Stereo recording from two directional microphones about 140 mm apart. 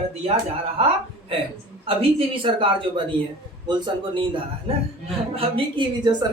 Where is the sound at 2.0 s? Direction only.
40° right (ahead or behind).